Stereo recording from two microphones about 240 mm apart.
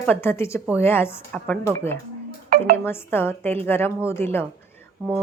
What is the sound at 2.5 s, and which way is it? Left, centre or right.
Speech, right.